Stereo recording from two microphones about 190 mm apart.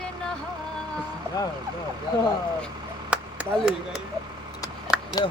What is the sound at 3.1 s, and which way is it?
Clapping, 5° right (ahead or behind).